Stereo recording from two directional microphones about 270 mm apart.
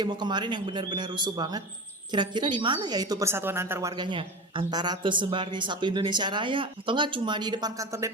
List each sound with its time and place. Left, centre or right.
0.0 s a woman's voice: centre